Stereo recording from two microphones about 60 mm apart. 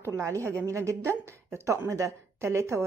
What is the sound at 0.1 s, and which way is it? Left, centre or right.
A woman's voice, right.